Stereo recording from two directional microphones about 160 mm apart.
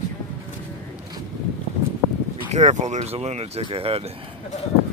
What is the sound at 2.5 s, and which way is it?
Speech, 45° right (ahead or behind).